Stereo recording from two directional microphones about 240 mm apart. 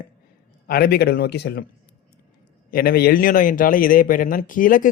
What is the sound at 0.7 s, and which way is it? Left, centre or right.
Speech, left.